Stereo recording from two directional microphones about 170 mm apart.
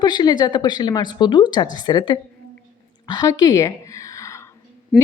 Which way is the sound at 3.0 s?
20° left (ahead or behind).